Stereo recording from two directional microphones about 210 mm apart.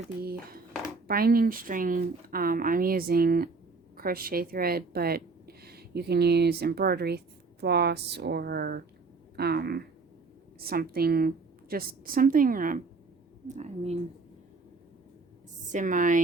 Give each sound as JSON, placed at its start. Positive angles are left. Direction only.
{"t": 0.2, "sound": "a woman's voice", "side_deg": -45}
{"t": 15.7, "sound": "a woman's voice", "side_deg": -40}